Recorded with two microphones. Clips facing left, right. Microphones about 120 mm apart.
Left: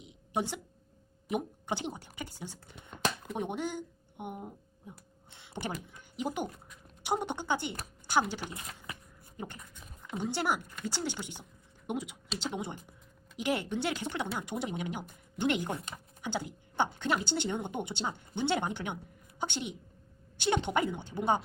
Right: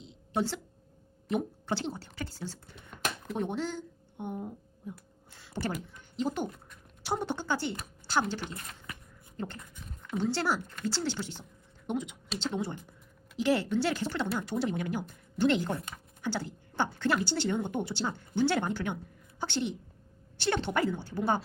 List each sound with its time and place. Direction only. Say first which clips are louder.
0.0 s a sound: right 2 dB; 15° left (ahead or behind)
1.3 s speech: right 2 dB; 15° left (ahead or behind)
4.9 s a sound: right 7 dB; 20° left (ahead or behind)
5.9 s speech: right 3 dB; 15° left (ahead or behind)
9.6 s dog: right 3 dB; centre (ahead or behind)
10.1 s a woman's voice: right 2 dB; 15° left (ahead or behind)